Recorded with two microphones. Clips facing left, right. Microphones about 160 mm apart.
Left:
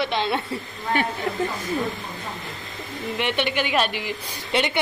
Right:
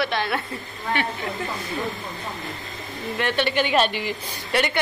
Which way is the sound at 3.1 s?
15° left (ahead or behind).